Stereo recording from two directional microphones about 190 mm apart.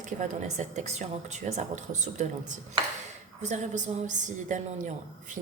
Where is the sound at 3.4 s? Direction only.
40° right (ahead or behind).